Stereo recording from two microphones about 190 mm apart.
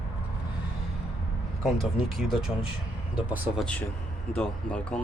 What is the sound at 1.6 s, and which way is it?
Speech, centre (ahead or behind).